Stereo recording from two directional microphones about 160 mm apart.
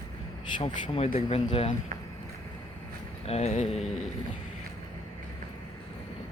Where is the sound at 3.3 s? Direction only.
45° left (ahead or behind).